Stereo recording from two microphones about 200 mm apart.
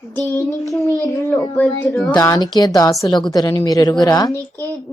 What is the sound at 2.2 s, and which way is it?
Speech, 20° left (ahead or behind).